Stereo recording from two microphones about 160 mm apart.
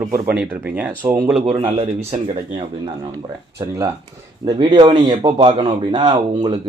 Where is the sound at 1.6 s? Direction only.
40° right (ahead or behind).